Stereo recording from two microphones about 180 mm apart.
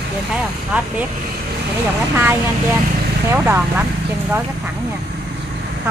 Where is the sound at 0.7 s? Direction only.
5° right (ahead or behind).